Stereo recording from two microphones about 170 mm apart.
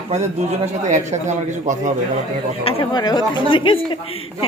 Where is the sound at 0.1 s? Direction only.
40° right (ahead or behind).